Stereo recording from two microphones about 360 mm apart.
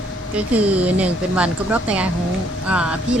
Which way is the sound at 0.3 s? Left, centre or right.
Centre.